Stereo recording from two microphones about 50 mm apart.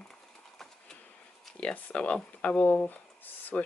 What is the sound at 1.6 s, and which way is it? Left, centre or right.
Speech, left.